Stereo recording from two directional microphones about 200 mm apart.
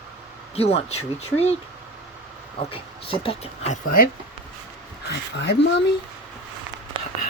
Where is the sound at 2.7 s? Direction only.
25° left (ahead or behind).